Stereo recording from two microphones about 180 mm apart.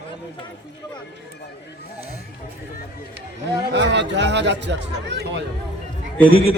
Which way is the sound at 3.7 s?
75° right (ahead or behind).